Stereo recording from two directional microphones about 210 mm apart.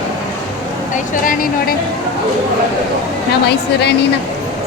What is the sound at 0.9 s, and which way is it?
Speech, 40° left (ahead or behind).